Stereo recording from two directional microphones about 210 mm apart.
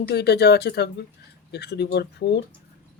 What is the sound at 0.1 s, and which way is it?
Speech, 50° left (ahead or behind).